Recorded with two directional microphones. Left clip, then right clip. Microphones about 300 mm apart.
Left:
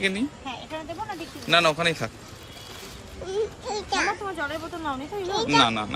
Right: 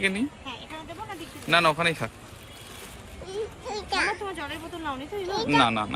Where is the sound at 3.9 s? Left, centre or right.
Centre.